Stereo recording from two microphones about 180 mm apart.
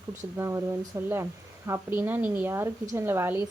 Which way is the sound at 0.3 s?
15° right (ahead or behind).